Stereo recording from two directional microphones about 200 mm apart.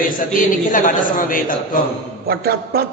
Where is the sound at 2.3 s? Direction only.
50° right (ahead or behind).